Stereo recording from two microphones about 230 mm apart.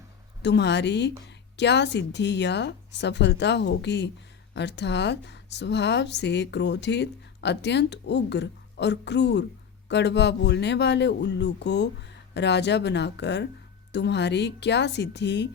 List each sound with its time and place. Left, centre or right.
0.4 s speech: left